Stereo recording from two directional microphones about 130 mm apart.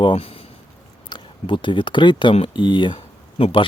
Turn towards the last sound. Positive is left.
turn(degrees=45)  # may be behind; listen again after turning